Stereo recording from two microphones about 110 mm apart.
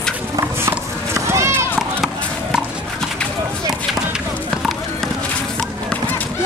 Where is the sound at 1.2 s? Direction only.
25° right (ahead or behind).